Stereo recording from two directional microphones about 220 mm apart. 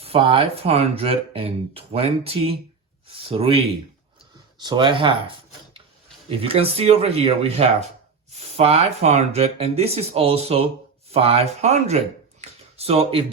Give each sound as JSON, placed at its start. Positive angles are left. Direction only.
{"t": 0.0, "sound": "speech", "side_deg": -25}
{"t": 4.6, "sound": "speech", "side_deg": -20}
{"t": 6.2, "sound": "speech", "side_deg": -25}
{"t": 12.4, "sound": "a sound", "side_deg": -30}